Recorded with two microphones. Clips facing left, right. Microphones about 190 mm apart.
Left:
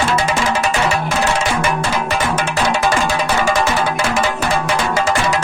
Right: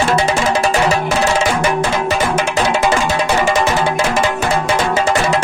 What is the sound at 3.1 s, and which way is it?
Music, 20° right (ahead or behind).